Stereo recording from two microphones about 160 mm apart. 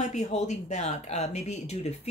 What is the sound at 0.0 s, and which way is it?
Speech, 45° left (ahead or behind).